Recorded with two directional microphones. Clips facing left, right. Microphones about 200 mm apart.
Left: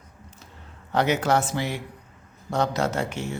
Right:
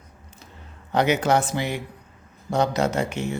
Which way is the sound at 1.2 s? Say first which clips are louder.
Right 2 dB; 20° right (ahead or behind).